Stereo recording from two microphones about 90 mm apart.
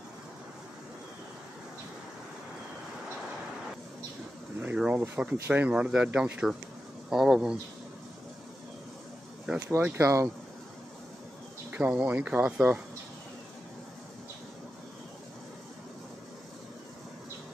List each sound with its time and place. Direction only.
4.6 s speech: 15° right (ahead or behind)
9.9 s speech: 35° right (ahead or behind)
11.7 s speech: 15° right (ahead or behind)